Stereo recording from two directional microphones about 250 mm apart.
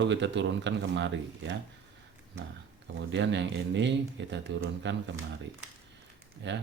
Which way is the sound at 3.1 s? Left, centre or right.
Right.